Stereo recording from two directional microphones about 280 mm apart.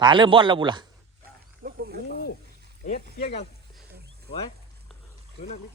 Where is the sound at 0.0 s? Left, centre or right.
Centre.